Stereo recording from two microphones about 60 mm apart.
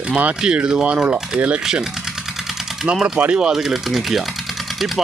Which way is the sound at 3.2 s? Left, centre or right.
Centre.